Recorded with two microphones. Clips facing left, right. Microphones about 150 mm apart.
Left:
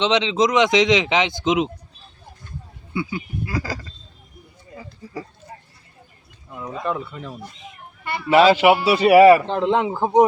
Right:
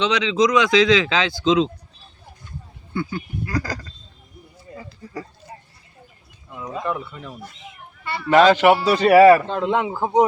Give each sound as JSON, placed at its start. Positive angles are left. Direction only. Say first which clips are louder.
{"t": 0.0, "sound": "speech", "louder": "even", "side_deg": 25}
{"t": 2.9, "sound": "a man's voice", "louder": "even", "side_deg": 10}
{"t": 6.5, "sound": "speech", "louder": "left 1 dB", "side_deg": 5}
{"t": 6.8, "sound": "a man's voice", "louder": "left 3 dB", "side_deg": 20}
{"t": 9.5, "sound": "speech", "louder": "left 2 dB", "side_deg": 20}